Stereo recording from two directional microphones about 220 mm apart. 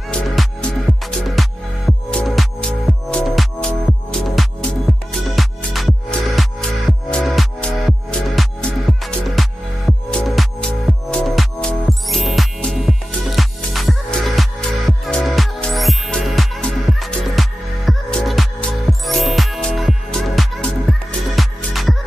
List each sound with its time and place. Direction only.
0.1 s music: 5° left (ahead or behind)